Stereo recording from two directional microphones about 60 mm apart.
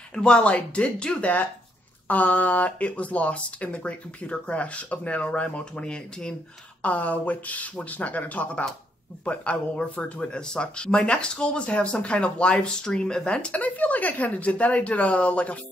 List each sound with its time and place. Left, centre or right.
0.1 s speech: centre
6.8 s speech: left